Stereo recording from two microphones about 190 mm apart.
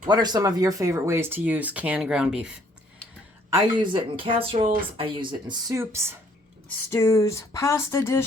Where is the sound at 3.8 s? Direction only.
25° right (ahead or behind).